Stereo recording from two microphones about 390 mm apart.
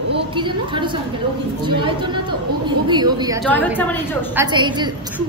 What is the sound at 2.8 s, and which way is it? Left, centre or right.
Speech, centre.